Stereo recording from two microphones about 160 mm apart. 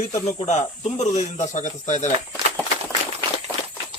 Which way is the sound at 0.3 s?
45° left (ahead or behind).